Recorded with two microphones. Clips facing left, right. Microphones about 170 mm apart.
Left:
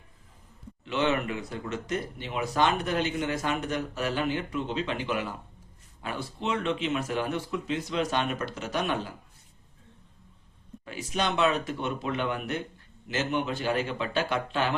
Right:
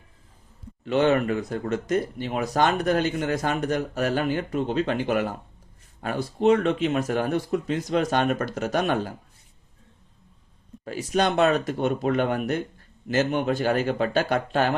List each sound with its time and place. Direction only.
0.9 s speech: 45° right (ahead or behind)
10.8 s speech: 40° right (ahead or behind)